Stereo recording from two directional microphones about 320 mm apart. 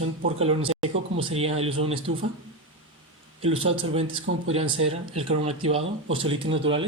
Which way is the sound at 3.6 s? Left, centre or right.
Centre.